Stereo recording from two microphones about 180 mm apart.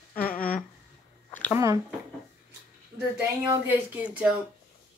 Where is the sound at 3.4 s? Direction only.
10° right (ahead or behind).